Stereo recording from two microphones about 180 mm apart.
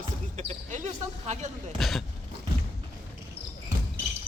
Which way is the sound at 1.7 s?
Centre (ahead or behind).